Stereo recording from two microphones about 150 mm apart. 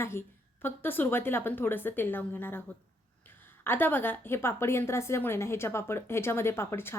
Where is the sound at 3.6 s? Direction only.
15° left (ahead or behind).